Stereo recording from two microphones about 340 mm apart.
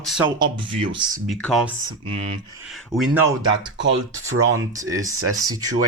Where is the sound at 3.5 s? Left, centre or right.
Right.